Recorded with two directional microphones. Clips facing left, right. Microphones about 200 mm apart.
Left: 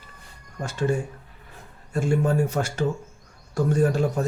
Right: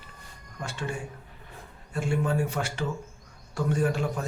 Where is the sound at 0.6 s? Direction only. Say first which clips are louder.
Left 9 dB; 40° left (ahead or behind).